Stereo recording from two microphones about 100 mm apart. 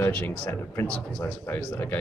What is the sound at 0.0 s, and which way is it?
Speech, 15° left (ahead or behind).